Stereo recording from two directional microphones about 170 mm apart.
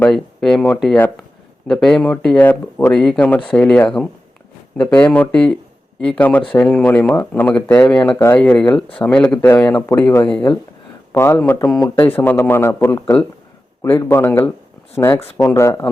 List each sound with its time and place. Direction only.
0.0 s speech: 5° left (ahead or behind)